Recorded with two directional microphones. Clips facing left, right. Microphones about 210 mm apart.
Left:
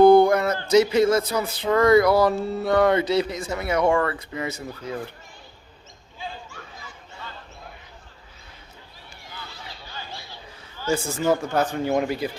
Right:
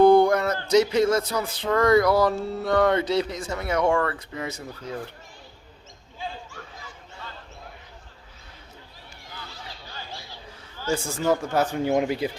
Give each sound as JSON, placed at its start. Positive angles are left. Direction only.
{"t": 0.0, "sound": "a sound", "side_deg": 10}
{"t": 9.3, "sound": "chatter", "side_deg": -40}
{"t": 10.9, "sound": "speech", "side_deg": 5}
{"t": 11.6, "sound": "speech", "side_deg": -10}